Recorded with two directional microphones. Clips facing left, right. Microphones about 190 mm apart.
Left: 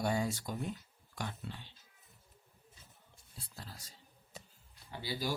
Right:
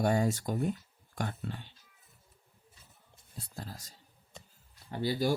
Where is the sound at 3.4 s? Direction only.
45° right (ahead or behind).